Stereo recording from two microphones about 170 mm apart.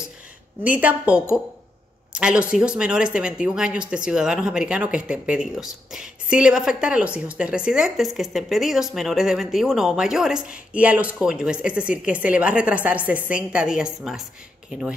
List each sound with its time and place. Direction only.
0.7 s a woman's voice: 10° right (ahead or behind)